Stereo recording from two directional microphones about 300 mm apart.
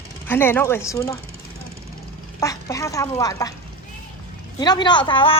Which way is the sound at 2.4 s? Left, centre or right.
Centre.